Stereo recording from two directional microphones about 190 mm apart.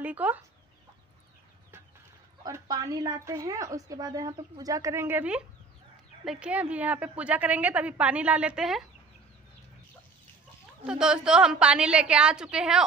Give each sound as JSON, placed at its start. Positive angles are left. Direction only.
{"t": 0.0, "sound": "speech", "side_deg": -10}
{"t": 2.4, "sound": "a woman's voice", "side_deg": -20}
{"t": 6.4, "sound": "a woman's voice", "side_deg": -5}
{"t": 10.9, "sound": "a woman's voice", "side_deg": -5}